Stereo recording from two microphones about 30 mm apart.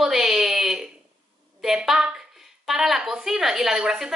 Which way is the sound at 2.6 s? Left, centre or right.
Centre.